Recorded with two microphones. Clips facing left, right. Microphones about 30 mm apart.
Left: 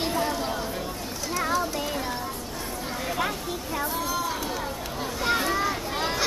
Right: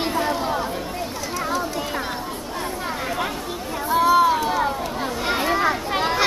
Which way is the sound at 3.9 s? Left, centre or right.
Right.